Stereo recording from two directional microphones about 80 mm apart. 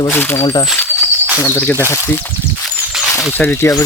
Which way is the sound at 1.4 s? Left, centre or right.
Left.